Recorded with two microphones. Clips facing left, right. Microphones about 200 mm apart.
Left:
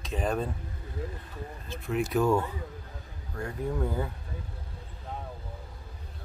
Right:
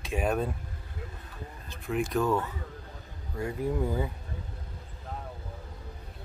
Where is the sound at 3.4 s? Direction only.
10° right (ahead or behind).